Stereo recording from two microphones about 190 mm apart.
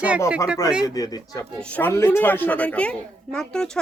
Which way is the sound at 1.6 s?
10° left (ahead or behind).